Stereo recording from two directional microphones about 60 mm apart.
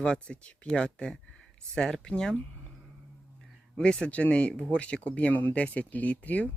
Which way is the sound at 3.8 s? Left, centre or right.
Centre.